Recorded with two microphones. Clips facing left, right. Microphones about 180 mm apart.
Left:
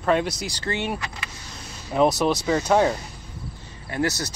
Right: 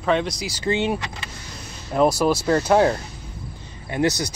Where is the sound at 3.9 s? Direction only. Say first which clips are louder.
Right 4 dB; 20° right (ahead or behind).